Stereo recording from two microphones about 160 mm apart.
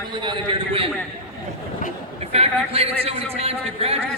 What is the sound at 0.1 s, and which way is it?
Speech, 30° right (ahead or behind).